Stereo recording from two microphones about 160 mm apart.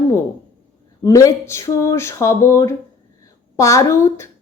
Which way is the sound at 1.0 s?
20° left (ahead or behind).